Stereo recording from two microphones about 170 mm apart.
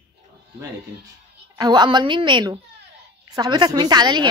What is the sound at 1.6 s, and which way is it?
Speech, 25° right (ahead or behind).